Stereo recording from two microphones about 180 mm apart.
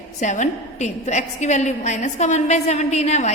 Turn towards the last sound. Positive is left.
turn(degrees=40)  # may be behind; listen again after turning